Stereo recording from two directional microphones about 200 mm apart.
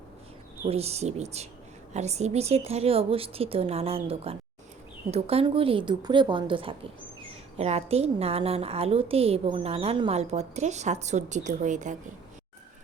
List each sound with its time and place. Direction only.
0.7 s a woman's voice: 30° right (ahead or behind)